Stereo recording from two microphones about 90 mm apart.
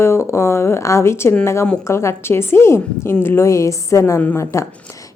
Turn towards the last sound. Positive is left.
turn(degrees=35)  # may be behind; listen again after turning